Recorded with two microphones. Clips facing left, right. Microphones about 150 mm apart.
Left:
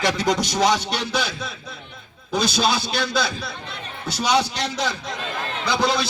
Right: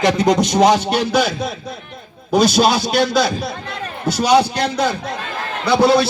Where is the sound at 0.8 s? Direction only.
55° right (ahead or behind).